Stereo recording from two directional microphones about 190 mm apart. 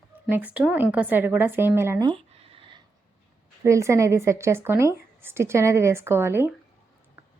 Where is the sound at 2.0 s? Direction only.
30° right (ahead or behind).